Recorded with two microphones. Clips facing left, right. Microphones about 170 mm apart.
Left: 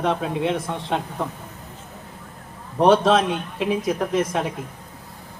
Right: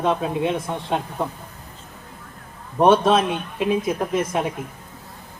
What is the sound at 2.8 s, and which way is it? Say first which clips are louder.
Speech: even; 80° left.